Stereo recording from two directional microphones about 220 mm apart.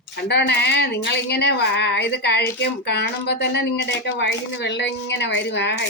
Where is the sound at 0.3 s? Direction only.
50° left (ahead or behind).